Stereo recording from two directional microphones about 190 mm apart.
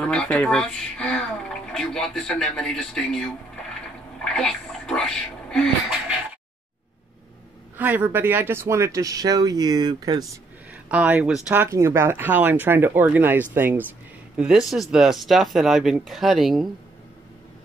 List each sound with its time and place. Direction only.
0.0 s speech: 5° left (ahead or behind)
7.7 s speech: 10° right (ahead or behind)
10.9 s speech: 10° right (ahead or behind)